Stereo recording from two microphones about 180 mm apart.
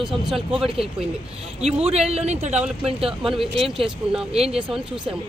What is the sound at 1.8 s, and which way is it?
Speech, 35° right (ahead or behind).